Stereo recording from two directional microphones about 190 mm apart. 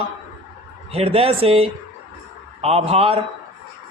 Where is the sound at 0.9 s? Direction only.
30° right (ahead or behind).